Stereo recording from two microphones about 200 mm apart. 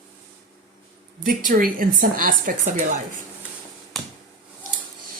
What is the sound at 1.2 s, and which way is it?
A woman's voice, 45° right (ahead or behind).